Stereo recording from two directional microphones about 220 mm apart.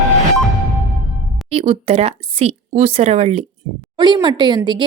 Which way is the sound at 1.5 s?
25° right (ahead or behind).